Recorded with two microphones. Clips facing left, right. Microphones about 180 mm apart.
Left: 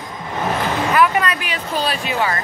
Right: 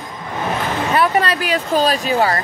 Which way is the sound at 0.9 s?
30° right (ahead or behind).